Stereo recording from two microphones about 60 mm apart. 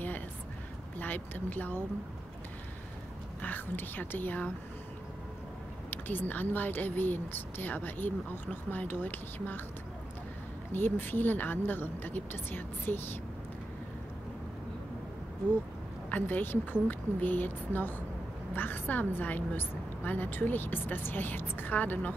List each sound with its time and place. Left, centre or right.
0.9 s speech: left
3.4 s speech: left
5.9 s speech: left
10.7 s speech: left
16.1 s a woman's voice: left